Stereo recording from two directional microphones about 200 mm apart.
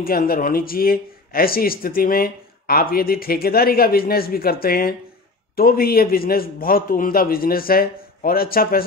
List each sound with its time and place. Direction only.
0.0 s speech: 45° left (ahead or behind)